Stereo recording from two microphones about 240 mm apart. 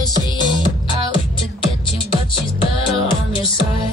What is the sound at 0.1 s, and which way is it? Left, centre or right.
Music, centre.